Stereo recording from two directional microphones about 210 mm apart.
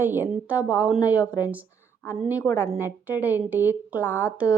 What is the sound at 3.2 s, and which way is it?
Speech, 10° right (ahead or behind).